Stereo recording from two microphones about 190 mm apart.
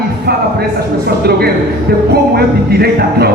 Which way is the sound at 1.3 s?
55° right (ahead or behind).